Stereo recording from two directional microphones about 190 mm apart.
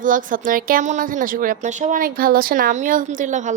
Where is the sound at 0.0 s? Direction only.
45° right (ahead or behind).